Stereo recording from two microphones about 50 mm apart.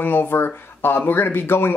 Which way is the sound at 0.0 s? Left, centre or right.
Left.